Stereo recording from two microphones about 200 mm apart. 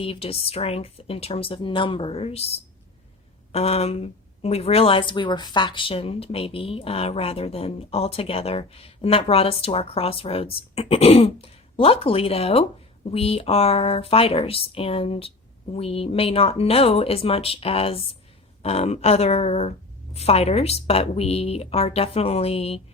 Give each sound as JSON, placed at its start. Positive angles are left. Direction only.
{"t": 0.0, "sound": "speech", "side_deg": 30}
{"t": 3.5, "sound": "a woman's voice", "side_deg": 30}